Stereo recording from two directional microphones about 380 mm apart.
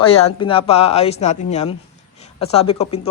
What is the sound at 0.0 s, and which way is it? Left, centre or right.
A woman's voice, centre.